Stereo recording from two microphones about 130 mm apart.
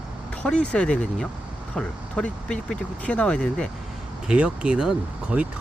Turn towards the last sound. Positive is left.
turn(degrees=-10)  # may be behind; listen again after turning